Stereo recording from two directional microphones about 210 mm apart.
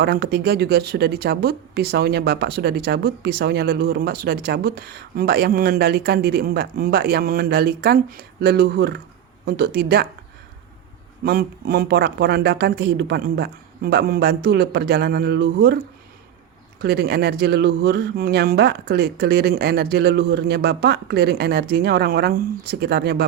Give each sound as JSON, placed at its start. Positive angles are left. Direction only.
{"t": 0.0, "sound": "speech", "side_deg": -50}
{"t": 11.2, "sound": "speech", "side_deg": -45}
{"t": 16.8, "sound": "speech", "side_deg": -50}